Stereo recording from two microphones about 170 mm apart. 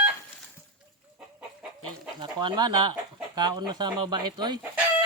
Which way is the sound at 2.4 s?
25° right (ahead or behind).